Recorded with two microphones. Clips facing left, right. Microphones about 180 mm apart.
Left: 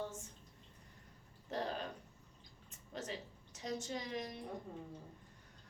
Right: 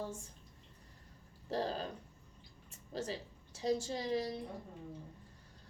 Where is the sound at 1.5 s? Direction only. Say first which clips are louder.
Right 4 dB; 30° right (ahead or behind).